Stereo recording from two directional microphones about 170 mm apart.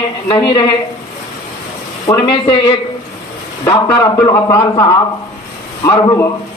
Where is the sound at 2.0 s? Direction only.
25° left (ahead or behind).